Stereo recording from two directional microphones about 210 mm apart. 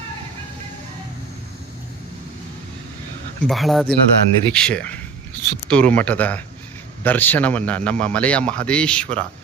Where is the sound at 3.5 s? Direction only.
Centre (ahead or behind).